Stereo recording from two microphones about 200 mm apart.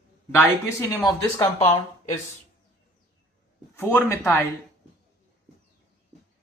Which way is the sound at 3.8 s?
10° left (ahead or behind).